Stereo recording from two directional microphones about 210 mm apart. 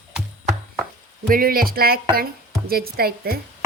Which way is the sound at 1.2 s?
45° right (ahead or behind).